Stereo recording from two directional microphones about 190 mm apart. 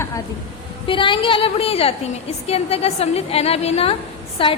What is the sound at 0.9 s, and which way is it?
A woman's voice, 25° left (ahead or behind).